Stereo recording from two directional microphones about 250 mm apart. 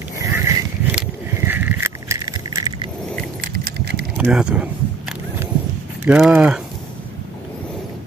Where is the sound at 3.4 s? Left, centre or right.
Right.